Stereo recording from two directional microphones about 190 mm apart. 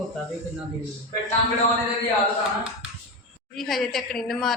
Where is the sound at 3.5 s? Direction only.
Centre (ahead or behind).